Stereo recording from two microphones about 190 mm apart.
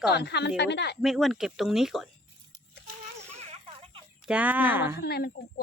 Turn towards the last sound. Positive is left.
turn(degrees=55)  # may be behind; listen again after turning